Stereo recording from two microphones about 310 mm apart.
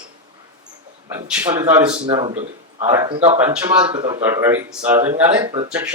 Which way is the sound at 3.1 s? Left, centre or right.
Centre.